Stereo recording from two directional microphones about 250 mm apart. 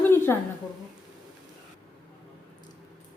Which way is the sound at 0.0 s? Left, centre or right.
Centre.